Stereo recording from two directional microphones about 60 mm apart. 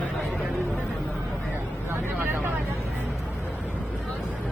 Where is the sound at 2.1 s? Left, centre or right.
Right.